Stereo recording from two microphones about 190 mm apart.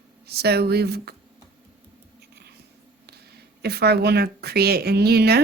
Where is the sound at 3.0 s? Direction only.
55° right (ahead or behind).